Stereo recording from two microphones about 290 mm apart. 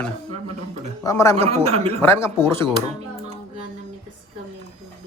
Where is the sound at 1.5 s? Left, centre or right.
Right.